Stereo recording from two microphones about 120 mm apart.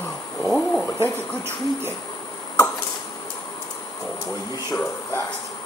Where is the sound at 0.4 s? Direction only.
20° left (ahead or behind).